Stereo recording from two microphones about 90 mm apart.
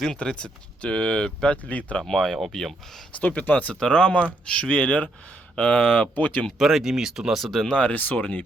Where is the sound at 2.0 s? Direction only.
Centre (ahead or behind).